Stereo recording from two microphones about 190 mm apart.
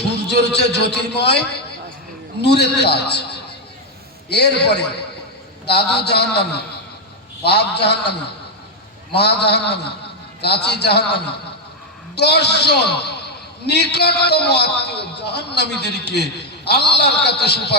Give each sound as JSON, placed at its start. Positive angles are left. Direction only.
{"t": 0.3, "sound": "a man's voice", "side_deg": 60}
{"t": 2.4, "sound": "a man's voice", "side_deg": 60}
{"t": 4.3, "sound": "a man's voice", "side_deg": 60}
{"t": 9.1, "sound": "a man's voice", "side_deg": 60}